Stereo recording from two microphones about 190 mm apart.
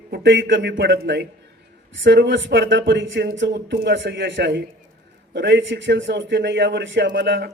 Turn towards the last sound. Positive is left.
turn(degrees=-65)  # may be behind; listen again after turning